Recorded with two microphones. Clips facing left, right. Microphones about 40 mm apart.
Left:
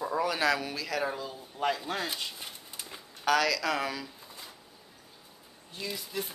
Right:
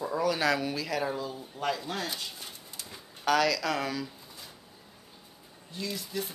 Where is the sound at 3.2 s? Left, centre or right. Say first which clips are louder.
Right 1 dB; centre.